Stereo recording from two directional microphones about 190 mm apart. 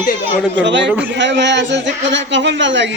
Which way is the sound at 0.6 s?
70° right (ahead or behind).